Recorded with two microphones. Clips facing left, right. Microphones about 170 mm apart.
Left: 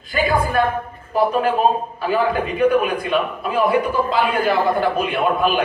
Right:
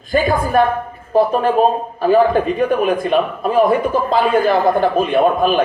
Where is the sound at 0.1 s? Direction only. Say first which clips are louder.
Right 4 dB; 45° right (ahead or behind).